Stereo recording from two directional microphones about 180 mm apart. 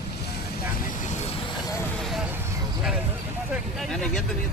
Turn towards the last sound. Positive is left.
turn(degrees=0)  # may be behind; listen again after turning